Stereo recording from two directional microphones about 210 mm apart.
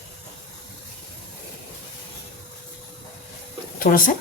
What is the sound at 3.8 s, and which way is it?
Speech, 40° left (ahead or behind).